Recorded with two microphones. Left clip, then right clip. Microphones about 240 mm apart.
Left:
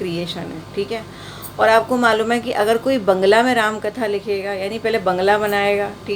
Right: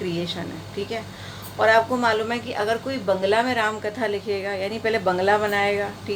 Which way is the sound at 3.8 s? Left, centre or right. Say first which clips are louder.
Left 4 dB; centre.